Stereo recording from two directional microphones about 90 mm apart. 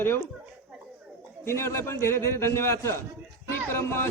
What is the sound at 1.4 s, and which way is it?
A man's voice, 30° left (ahead or behind).